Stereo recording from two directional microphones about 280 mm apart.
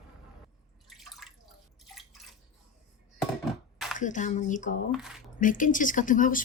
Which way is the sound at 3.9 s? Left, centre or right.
Left.